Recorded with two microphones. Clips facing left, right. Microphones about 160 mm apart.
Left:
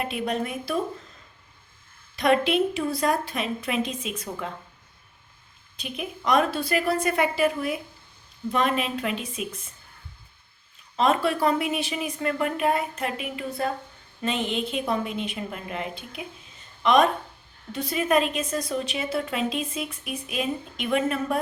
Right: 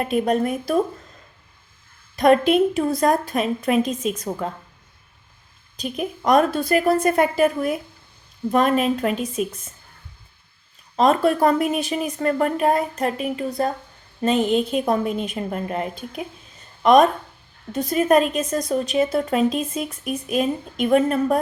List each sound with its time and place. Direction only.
0.0 s a woman's voice: 45° right (ahead or behind)
2.1 s a woman's voice: 45° right (ahead or behind)
5.7 s a woman's voice: 40° right (ahead or behind)
10.9 s a woman's voice: 40° right (ahead or behind)